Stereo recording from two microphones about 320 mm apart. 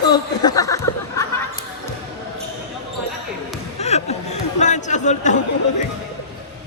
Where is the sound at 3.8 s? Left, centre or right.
Centre.